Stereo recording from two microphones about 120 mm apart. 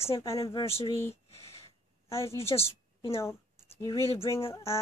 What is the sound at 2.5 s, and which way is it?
Speech, 35° left (ahead or behind).